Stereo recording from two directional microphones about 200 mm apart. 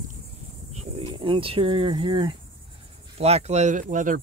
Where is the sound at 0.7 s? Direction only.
30° right (ahead or behind).